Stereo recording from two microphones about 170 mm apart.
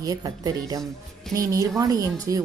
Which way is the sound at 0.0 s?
20° right (ahead or behind).